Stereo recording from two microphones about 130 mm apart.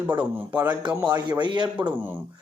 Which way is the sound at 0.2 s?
10° right (ahead or behind).